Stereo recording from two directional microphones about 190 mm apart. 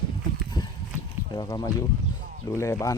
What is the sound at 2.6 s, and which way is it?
Speech, 15° left (ahead or behind).